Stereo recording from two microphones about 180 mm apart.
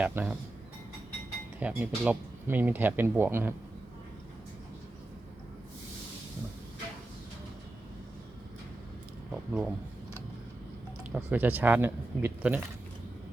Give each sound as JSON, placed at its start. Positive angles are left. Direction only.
{"t": 0.0, "sound": "speech", "side_deg": -10}
{"t": 1.5, "sound": "speech", "side_deg": -10}
{"t": 9.3, "sound": "a sound", "side_deg": 0}
{"t": 11.1, "sound": "speech", "side_deg": -10}